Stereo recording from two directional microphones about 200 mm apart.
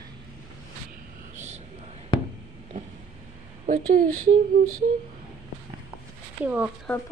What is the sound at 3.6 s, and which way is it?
Speech, 45° right (ahead or behind).